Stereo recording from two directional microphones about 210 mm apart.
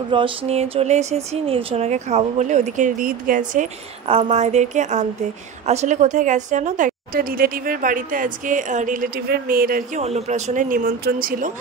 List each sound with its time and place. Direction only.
0.1 s speech: 25° right (ahead or behind); by 10.0 s 45° right (ahead or behind)
10.0 s speech: 30° right (ahead or behind)